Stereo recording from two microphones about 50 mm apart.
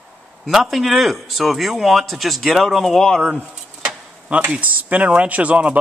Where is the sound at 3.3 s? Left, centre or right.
Right.